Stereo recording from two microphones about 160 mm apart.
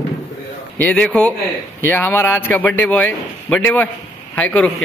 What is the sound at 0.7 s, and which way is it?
A man's voice, 10° left (ahead or behind).